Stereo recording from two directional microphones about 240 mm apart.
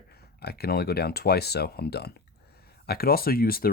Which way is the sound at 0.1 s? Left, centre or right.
Left.